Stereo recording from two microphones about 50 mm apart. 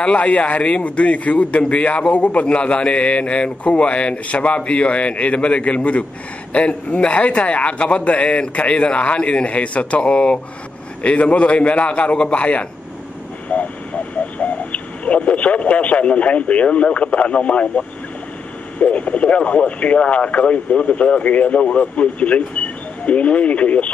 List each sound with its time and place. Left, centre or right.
0.0 s a man's voice: left
13.5 s vehicle: left
14.1 s speech: left